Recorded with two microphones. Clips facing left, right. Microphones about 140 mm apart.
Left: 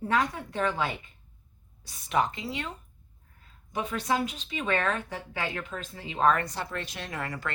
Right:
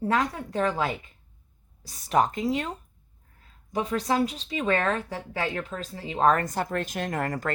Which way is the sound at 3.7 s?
35° right (ahead or behind).